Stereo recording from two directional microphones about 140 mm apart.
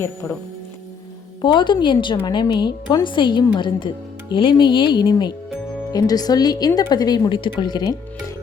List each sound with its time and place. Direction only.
1.4 s a woman's voice: 35° left (ahead or behind)